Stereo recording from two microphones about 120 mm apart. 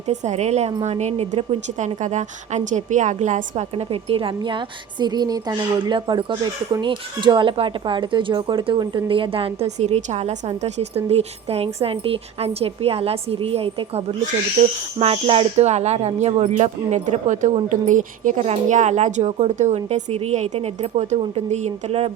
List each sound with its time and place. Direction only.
0.1 s a woman's voice: 70° right (ahead or behind); by 9.6 s 50° right (ahead or behind)
9.6 s a woman's voice: 70° right (ahead or behind)
14.6 s a woman's voice: 70° right (ahead or behind)
14.9 s a woman's voice: 50° right (ahead or behind)
15.6 s a woman's voice: 65° right (ahead or behind)